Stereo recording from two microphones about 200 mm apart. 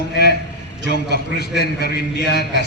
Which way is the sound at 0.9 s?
55° left (ahead or behind).